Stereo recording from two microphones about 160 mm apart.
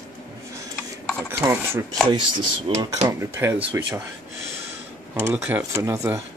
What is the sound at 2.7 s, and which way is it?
Speech, 30° right (ahead or behind).